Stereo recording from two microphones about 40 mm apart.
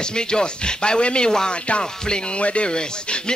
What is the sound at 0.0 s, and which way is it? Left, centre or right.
Speech, left.